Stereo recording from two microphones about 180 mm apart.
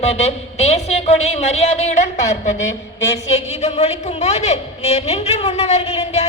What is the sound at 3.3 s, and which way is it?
A woman's voice, 35° left (ahead or behind).